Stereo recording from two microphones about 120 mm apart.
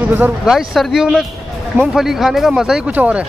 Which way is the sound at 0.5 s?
Centre (ahead or behind).